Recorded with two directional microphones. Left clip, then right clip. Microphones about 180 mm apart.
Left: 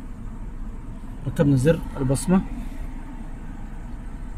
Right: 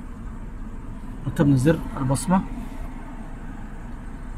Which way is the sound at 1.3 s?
30° right (ahead or behind).